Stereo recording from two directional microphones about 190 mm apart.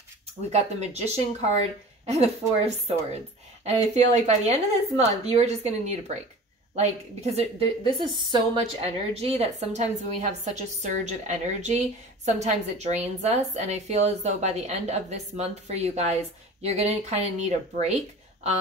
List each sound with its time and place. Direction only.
0.5 s a woman's voice: 35° right (ahead or behind)
7.3 s a woman's voice: 25° right (ahead or behind)